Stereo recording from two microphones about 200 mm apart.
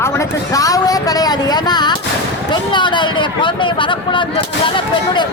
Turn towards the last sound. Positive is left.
turn(degrees=25)  # may be behind; listen again after turning